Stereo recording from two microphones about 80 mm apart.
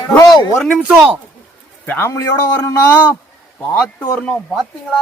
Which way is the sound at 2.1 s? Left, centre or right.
Left.